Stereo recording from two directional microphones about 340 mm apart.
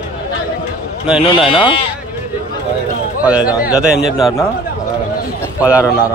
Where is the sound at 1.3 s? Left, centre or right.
Centre.